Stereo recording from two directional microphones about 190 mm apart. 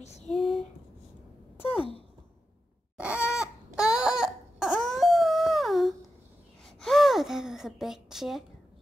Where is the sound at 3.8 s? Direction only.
5° right (ahead or behind).